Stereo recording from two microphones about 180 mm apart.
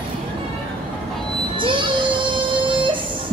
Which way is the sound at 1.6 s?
25° right (ahead or behind).